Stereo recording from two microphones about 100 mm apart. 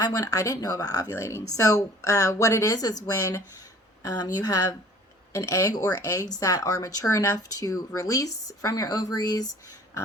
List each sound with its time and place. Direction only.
0.0 s speech: 35° left (ahead or behind)